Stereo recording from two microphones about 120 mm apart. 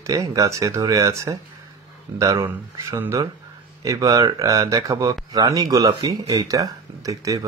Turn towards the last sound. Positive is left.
turn(degrees=-30)  # may be behind; listen again after turning